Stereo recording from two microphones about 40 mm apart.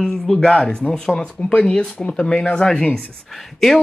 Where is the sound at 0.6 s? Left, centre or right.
Left.